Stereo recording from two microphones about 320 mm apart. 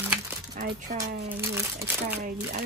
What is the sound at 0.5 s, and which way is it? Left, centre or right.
Speech, right.